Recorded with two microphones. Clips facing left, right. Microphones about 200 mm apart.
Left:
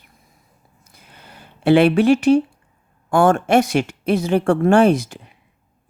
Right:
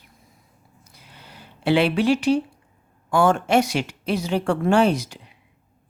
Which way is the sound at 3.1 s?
50° left (ahead or behind).